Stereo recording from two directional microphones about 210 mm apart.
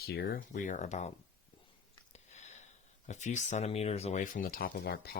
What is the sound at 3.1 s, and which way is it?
Speech, 35° left (ahead or behind).